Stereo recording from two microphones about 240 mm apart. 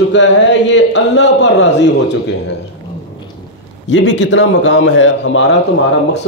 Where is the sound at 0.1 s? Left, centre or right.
Left.